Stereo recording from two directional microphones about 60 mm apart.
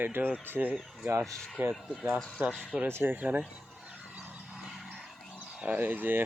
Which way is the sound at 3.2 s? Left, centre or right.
Right.